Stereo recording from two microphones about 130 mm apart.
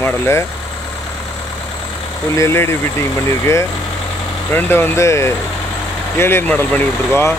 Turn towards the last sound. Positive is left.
turn(degrees=20)  # may be behind; listen again after turning